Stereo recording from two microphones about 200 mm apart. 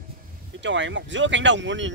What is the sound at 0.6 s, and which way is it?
Speech, 65° right (ahead or behind).